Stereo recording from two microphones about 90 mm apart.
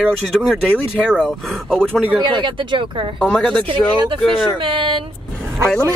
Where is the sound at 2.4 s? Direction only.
65° right (ahead or behind).